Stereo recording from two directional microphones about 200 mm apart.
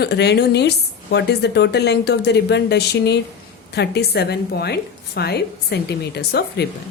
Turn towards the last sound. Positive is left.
turn(degrees=55)  # may be behind; listen again after turning